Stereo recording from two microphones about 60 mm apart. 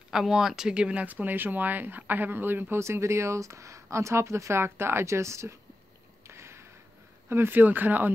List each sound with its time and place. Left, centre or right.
0.1 s speech: centre
1.0 s speech: right
2.8 s speech: right
6.2 s a sound: right
7.2 s speech: right